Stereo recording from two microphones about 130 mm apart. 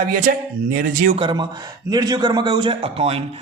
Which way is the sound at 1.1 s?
40° right (ahead or behind).